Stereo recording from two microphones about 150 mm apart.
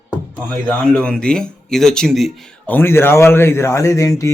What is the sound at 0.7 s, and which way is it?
A man's voice, 5° left (ahead or behind).